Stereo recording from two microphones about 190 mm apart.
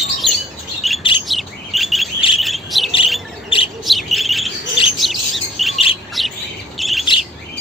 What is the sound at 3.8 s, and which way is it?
Bird, centre (ahead or behind).